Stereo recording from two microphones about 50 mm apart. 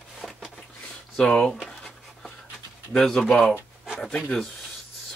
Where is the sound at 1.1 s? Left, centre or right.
Centre.